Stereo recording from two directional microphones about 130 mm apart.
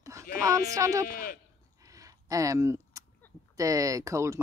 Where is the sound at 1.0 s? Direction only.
90° left.